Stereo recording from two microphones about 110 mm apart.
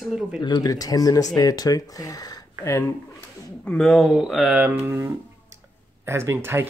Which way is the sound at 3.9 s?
5° right (ahead or behind).